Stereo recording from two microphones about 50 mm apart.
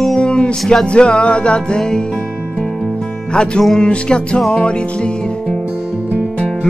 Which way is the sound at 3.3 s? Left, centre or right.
Centre.